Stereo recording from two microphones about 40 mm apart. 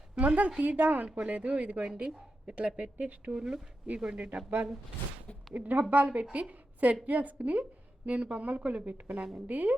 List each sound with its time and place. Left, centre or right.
0.2 s a woman's voice: right
2.6 s a woman's voice: right
3.3 s speech: centre
3.9 s speech: right
5.5 s a woman's voice: right